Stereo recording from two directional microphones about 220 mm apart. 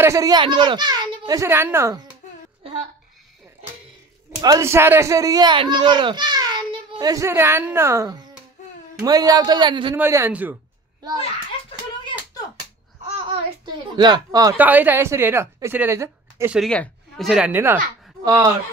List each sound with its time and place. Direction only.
0.0 s speech: 15° right (ahead or behind)
2.6 s a sound: 25° right (ahead or behind)
4.4 s a child's voice: 15° right (ahead or behind)
9.9 s a child's voice: 10° right (ahead or behind)
13.9 s speech: 20° right (ahead or behind)
16.5 s speech: 5° left (ahead or behind); by 18.5 s 15° right (ahead or behind)